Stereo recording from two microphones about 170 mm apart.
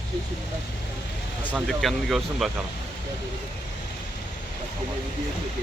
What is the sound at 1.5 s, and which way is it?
Speech, centre (ahead or behind).